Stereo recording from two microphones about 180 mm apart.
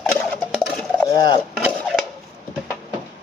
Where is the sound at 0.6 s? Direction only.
Centre (ahead or behind).